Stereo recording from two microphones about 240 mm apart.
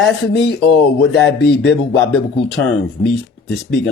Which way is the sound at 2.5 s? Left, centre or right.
Left.